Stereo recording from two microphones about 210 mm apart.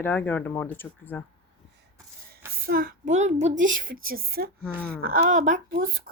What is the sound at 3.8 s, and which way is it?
A woman's voice, 45° right (ahead or behind).